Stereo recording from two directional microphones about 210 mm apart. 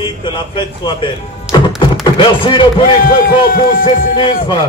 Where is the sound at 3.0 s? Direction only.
45° left (ahead or behind).